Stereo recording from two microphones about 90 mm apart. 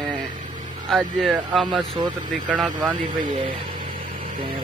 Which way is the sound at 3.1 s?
70° right (ahead or behind).